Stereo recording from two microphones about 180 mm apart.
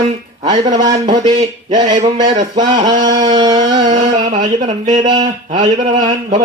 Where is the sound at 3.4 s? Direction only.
20° right (ahead or behind).